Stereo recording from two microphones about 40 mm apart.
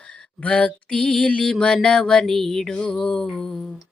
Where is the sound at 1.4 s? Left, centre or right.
Left.